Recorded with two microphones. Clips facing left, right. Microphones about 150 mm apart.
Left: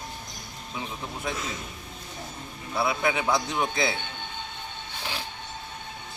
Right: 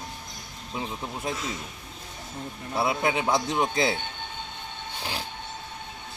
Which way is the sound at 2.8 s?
25° right (ahead or behind).